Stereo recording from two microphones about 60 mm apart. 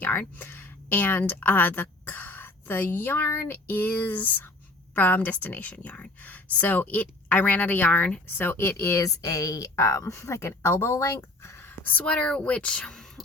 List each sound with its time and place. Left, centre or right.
0.0 s a woman's voice: left
9.0 s speech: left
12.0 s a woman's voice: centre